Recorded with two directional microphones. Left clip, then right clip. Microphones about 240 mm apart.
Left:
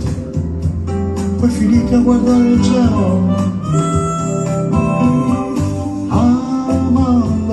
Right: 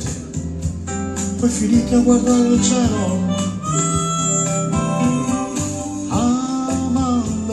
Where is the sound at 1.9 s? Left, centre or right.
Centre.